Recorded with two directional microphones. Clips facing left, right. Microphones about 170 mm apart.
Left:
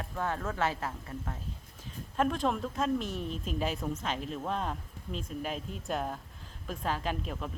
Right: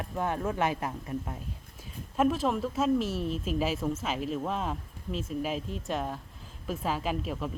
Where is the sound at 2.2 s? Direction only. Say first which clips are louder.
Right 3 dB; 5° right (ahead or behind).